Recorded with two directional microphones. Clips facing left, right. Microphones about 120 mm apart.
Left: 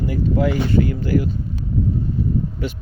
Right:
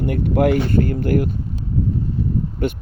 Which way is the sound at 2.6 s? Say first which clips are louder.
Right 5 dB; 55° right (ahead or behind).